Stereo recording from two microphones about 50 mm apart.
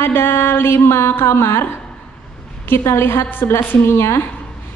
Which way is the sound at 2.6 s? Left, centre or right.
Left.